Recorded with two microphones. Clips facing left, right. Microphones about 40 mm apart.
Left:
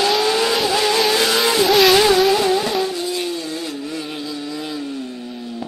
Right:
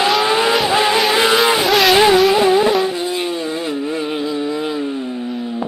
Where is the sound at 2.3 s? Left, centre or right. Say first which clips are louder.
Right 5 dB; right.